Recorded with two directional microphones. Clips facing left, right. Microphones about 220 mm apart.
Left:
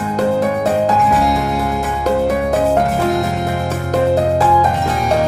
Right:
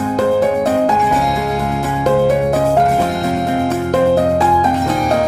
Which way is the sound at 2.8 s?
Centre (ahead or behind).